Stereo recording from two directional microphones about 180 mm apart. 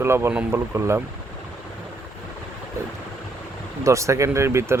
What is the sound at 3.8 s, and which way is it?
Speech, 15° right (ahead or behind).